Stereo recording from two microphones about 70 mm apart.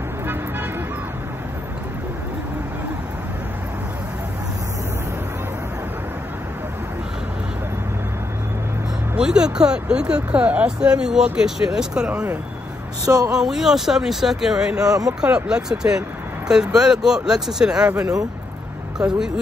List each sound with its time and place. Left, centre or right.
9.1 s speech: centre
13.0 s speech: right
13.3 s speech: centre
18.9 s speech: centre